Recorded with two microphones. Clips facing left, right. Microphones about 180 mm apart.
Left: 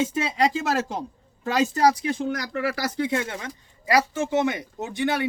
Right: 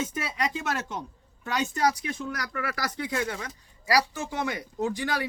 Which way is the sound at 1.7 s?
30° left (ahead or behind).